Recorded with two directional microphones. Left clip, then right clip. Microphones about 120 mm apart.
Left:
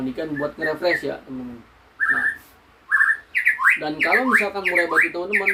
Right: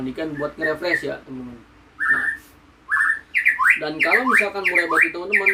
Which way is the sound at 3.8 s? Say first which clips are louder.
Right 1 dB; 10° right (ahead or behind).